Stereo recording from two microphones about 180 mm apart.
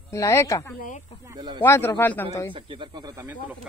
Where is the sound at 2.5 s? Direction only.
25° right (ahead or behind).